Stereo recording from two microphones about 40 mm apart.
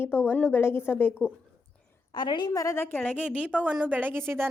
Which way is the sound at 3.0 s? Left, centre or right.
Left.